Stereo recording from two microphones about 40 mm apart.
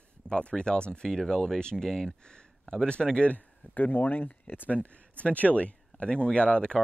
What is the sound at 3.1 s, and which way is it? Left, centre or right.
Speech, left.